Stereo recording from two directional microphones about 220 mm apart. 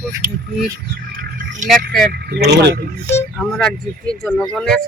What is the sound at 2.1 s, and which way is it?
Speech, 45° right (ahead or behind).